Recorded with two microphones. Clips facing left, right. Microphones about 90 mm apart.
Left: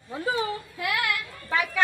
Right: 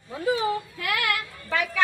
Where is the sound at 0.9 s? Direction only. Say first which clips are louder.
Right 1 dB; 90° right.